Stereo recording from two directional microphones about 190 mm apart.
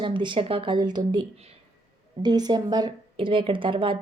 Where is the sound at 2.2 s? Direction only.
20° right (ahead or behind).